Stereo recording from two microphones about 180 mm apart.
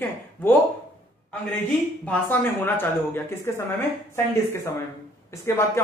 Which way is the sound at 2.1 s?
10° left (ahead or behind).